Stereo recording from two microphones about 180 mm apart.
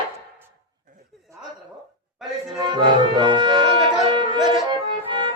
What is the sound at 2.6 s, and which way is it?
Music, 25° right (ahead or behind).